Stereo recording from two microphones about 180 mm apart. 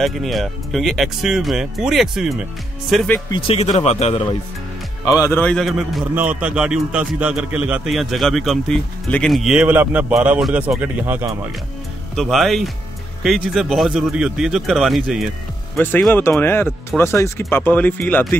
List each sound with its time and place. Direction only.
0.0 s a man's voice: centre (ahead or behind)
3.3 s speech: 30° left (ahead or behind)
5.0 s a man's voice: 20° left (ahead or behind); by 11.3 s 10° right (ahead or behind)
12.2 s a man's voice: centre (ahead or behind)